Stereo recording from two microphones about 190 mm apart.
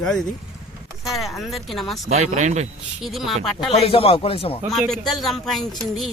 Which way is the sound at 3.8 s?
30° left (ahead or behind).